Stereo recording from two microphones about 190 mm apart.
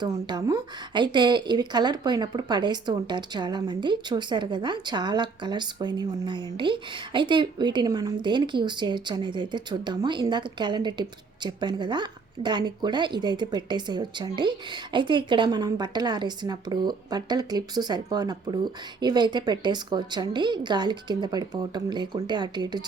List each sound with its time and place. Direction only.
0.0 s speech: 20° right (ahead or behind)